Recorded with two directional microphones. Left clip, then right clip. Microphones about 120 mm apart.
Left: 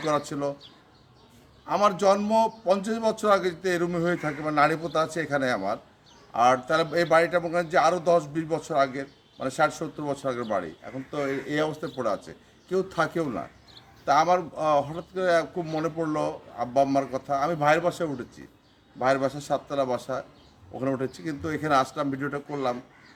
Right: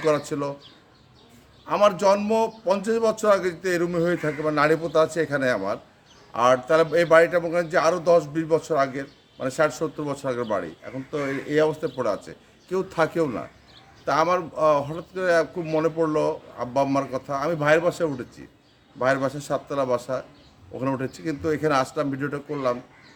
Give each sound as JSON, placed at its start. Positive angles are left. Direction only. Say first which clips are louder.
{"t": 0.0, "sound": "speech", "louder": "right 3 dB", "side_deg": -20}
{"t": 1.6, "sound": "speech", "louder": "right 3 dB", "side_deg": -20}